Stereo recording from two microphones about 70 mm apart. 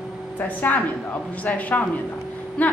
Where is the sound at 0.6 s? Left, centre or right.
Left.